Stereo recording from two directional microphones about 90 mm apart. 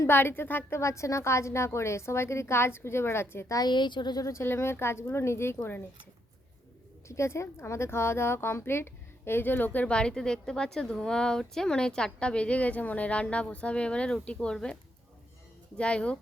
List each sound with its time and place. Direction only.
0.0 s a woman's voice: 25° left (ahead or behind)
3.6 s a woman's voice: 55° left (ahead or behind); by 5.5 s 30° left (ahead or behind)
7.1 s speech: 30° left (ahead or behind); by 14.8 s 10° left (ahead or behind)
15.8 s speech: 10° left (ahead or behind)